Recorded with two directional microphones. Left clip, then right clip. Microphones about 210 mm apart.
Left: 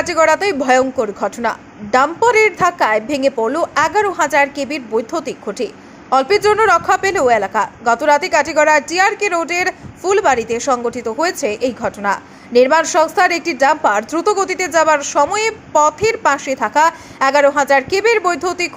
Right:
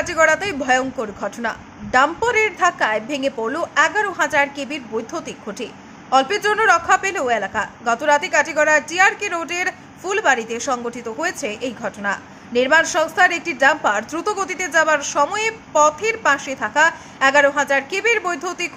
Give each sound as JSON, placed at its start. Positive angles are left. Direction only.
{"t": 0.0, "sound": "speech", "side_deg": 15}